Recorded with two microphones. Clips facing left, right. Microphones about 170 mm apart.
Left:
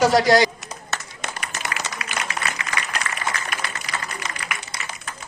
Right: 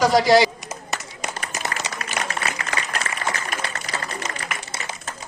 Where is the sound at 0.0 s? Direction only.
Centre (ahead or behind).